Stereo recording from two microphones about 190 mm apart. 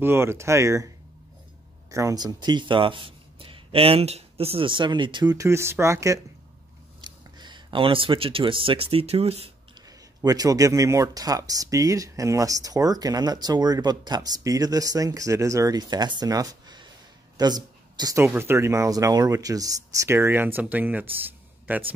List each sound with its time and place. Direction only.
0.0 s speech: 15° right (ahead or behind)
1.9 s speech: 15° right (ahead or behind)
7.0 s a sound: 25° right (ahead or behind)
8.9 s speech: 35° right (ahead or behind)
9.8 s speech: 20° right (ahead or behind)